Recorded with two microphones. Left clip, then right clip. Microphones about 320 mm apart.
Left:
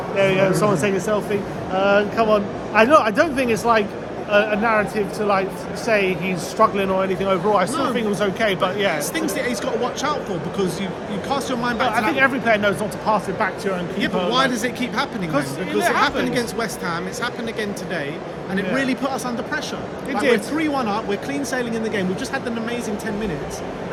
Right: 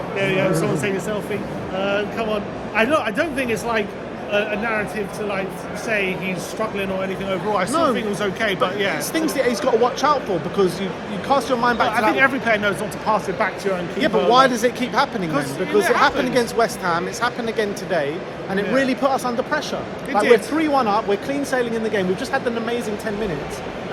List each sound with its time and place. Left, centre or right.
0.2 s speech: centre
9.1 s speech: centre
11.9 s speech: centre
14.3 s speech: centre
15.3 s speech: centre
16.3 s speech: centre